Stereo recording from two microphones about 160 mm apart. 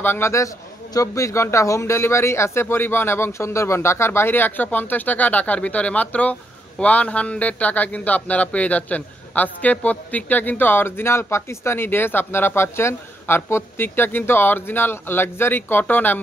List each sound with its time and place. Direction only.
0.0 s a man's voice: 15° left (ahead or behind)